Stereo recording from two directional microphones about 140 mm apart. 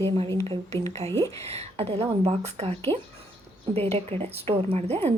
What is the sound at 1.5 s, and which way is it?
Speech, 50° right (ahead or behind).